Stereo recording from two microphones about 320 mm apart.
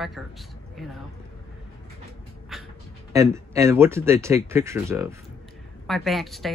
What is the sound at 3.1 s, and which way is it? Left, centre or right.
Speech, centre.